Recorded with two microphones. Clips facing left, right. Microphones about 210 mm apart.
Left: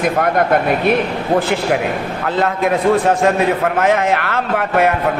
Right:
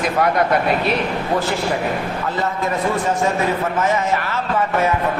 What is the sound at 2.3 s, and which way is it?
A man's voice, 60° left (ahead or behind).